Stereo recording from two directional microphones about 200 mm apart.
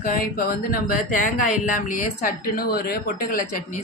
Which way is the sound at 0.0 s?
45° left (ahead or behind).